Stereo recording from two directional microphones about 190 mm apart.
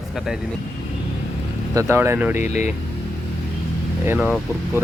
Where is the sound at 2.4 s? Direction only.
40° left (ahead or behind).